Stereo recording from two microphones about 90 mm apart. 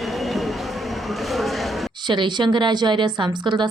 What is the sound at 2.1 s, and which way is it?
A woman's voice, 60° right (ahead or behind).